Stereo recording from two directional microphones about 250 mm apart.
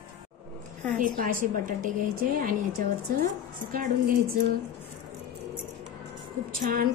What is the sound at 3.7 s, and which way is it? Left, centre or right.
Speech, right.